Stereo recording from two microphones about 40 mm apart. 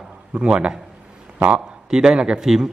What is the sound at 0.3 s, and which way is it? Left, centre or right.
Speech, right.